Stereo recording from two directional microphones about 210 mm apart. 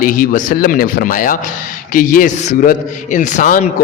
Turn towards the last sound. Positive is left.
turn(degrees=35)  # may be behind; listen again after turning